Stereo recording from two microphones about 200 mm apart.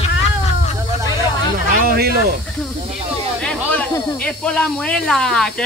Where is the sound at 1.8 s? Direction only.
50° right (ahead or behind).